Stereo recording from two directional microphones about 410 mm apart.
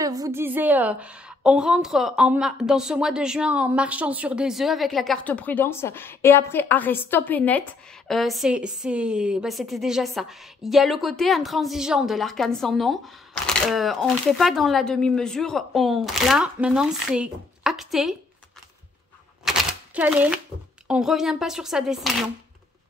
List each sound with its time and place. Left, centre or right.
0.0 s a woman's voice: centre
19.4 s typewriter: centre
20.8 s a woman's voice: centre